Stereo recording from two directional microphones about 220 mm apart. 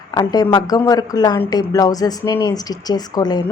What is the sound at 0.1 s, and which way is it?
Speech, 15° left (ahead or behind).